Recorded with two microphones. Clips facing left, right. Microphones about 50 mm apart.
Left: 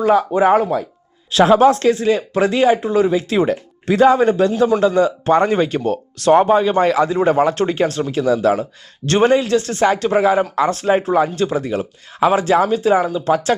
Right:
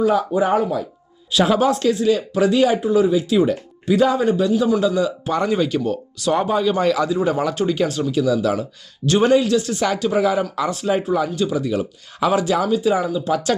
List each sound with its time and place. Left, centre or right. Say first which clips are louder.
0.0 s speech: left 4 dB; left
10.5 s speech: left 5 dB; left
11.8 s speech: left 4 dB; left